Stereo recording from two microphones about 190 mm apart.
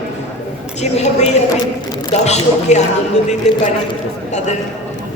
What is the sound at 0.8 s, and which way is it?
A man's voice, 35° left (ahead or behind).